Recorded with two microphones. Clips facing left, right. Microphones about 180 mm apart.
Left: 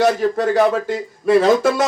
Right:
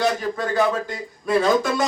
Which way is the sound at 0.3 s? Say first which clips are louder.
Left 5 dB; 65° left (ahead or behind).